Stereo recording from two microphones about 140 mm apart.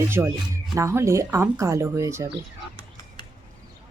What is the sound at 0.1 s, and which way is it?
Speech, 20° right (ahead or behind).